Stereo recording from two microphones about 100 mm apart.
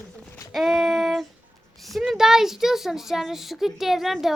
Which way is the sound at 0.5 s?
Centre (ahead or behind).